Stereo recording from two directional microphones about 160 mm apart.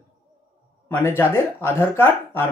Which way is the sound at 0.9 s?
15° left (ahead or behind).